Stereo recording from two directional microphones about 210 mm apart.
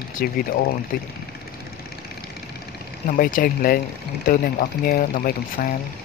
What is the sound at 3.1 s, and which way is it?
Speech, 40° left (ahead or behind).